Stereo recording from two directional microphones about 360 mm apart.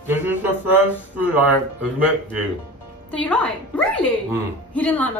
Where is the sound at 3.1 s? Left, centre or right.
Centre.